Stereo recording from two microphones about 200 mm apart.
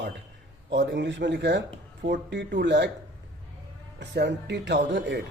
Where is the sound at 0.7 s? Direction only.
60° right (ahead or behind).